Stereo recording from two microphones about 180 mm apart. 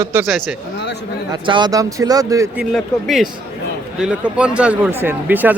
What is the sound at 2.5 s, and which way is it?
Speech, centre (ahead or behind).